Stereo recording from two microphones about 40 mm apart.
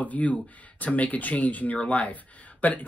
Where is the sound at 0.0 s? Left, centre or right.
Left.